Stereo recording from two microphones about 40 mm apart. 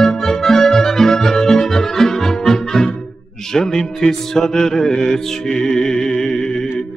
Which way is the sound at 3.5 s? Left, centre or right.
Centre.